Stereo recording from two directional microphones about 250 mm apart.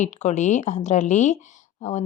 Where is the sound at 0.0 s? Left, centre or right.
Left.